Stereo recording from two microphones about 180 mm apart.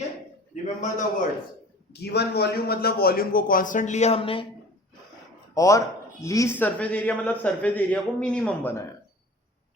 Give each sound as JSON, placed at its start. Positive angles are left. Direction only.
{"t": 0.5, "sound": "a man's voice", "side_deg": 45}
{"t": 1.9, "sound": "a man's voice", "side_deg": 65}
{"t": 5.5, "sound": "a man's voice", "side_deg": 15}